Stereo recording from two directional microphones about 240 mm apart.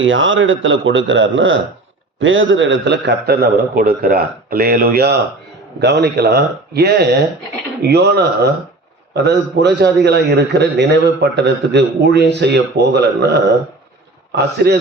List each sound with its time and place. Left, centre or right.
0.0 s a man's voice: right